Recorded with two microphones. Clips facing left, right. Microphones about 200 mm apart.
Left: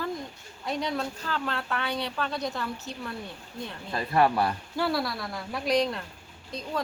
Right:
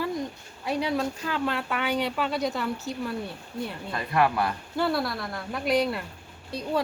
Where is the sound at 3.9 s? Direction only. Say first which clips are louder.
Left 1 dB; 30° left (ahead or behind).